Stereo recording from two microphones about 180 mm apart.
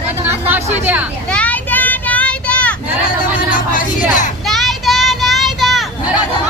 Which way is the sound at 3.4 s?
50° left (ahead or behind).